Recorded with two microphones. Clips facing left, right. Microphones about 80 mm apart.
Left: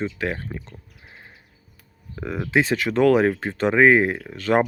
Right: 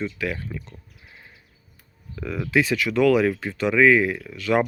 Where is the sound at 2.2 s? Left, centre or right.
Left.